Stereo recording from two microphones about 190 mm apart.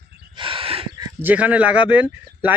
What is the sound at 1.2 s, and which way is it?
Speech, 10° right (ahead or behind).